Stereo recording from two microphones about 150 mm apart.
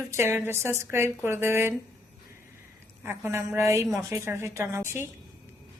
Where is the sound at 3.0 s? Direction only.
15° right (ahead or behind).